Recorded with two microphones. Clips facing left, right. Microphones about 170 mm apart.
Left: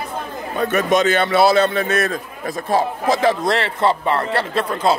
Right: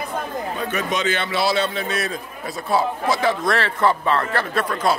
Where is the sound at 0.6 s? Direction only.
50° left (ahead or behind).